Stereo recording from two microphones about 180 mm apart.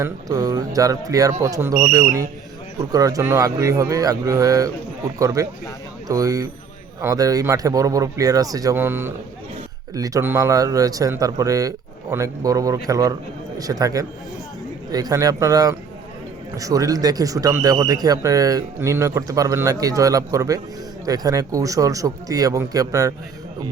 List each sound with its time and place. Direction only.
0.0 s a man's voice: 20° right (ahead or behind)